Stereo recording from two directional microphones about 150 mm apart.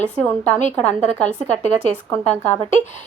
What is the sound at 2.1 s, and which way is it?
Speech, 10° left (ahead or behind).